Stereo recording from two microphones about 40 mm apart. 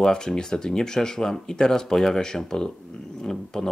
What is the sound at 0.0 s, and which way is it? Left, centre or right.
Speech, centre.